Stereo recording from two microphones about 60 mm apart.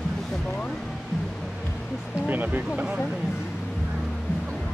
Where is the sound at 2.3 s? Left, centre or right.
Right.